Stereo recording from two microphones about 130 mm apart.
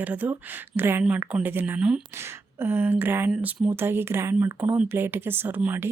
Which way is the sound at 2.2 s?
20° right (ahead or behind).